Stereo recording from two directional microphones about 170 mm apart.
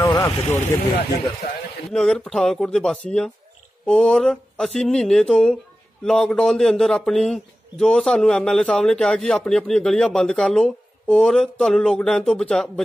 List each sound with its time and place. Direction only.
0.0 s vehicle: 15° left (ahead or behind)
1.9 s a man's voice: centre (ahead or behind)